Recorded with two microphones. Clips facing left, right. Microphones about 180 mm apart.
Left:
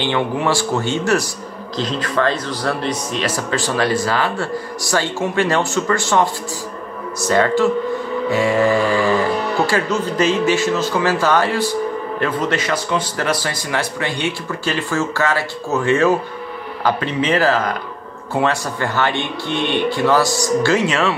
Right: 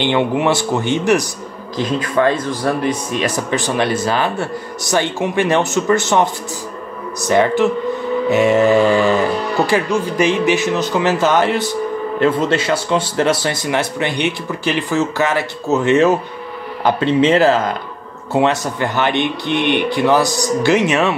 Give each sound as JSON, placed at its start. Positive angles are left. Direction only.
{"t": 0.0, "sound": "speech", "side_deg": -20}
{"t": 9.7, "sound": "speech", "side_deg": -15}